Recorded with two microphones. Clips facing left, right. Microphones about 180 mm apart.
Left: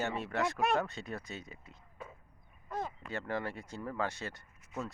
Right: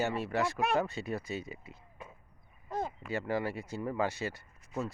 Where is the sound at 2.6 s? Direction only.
30° right (ahead or behind).